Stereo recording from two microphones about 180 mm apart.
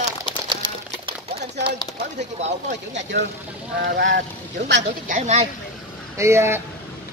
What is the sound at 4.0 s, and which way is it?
Speech, 75° right (ahead or behind).